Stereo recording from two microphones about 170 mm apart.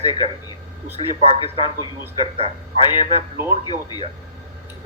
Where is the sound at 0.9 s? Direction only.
35° right (ahead or behind).